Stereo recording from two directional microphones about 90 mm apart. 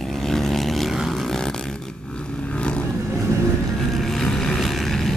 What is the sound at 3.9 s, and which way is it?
Vehicle, 5° left (ahead or behind).